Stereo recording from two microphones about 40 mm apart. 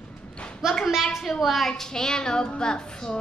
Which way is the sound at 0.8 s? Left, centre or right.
Centre.